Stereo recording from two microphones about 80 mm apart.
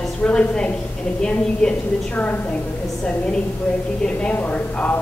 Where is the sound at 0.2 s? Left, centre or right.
Centre.